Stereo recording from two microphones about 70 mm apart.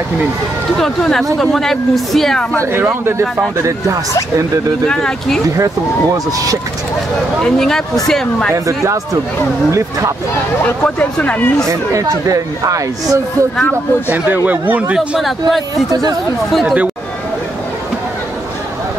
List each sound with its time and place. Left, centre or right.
0.7 s speech: centre
2.6 s speech: right
4.8 s speech: centre
5.6 s speech: right
7.4 s speech: centre
8.6 s speech: right
10.8 s speech: centre
11.7 s speech: right
14.0 s speech: right
15.0 s speech: centre
15.7 s speech: right
16.6 s speech: centre